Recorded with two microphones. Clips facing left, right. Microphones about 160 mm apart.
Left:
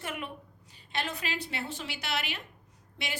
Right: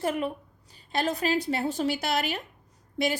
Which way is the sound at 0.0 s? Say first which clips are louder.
Right 10 dB; 35° right (ahead or behind).